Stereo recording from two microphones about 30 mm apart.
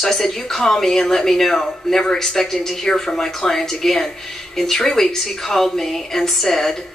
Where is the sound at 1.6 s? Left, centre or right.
Left.